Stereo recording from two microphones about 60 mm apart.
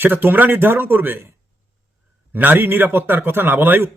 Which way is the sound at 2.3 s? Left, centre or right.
Right.